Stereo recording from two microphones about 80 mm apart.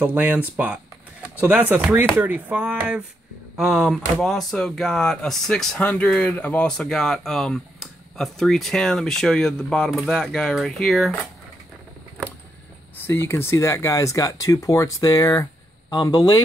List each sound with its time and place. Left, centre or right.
0.0 s speech: right
3.5 s speech: centre
5.8 s speech: centre
6.8 s speech: centre
12.9 s speech: left